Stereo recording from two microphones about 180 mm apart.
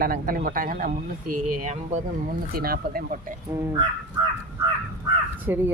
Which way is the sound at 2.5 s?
55° right (ahead or behind).